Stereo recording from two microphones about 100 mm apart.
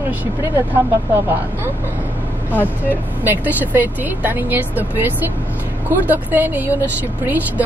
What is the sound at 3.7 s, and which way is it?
A woman's voice, 15° right (ahead or behind).